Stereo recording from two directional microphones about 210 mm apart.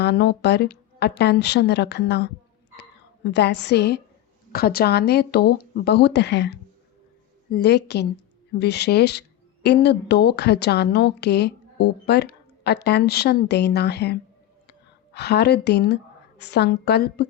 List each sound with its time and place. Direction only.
0.0 s a woman's voice: 50° left (ahead or behind)